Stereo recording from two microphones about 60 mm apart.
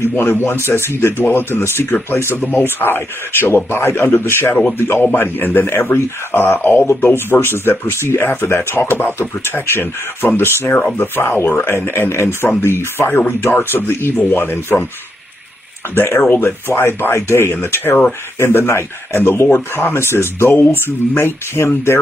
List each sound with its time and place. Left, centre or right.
0.0 s speech: left
15.9 s speech: left
20.5 s speech: left
20.8 s speech: left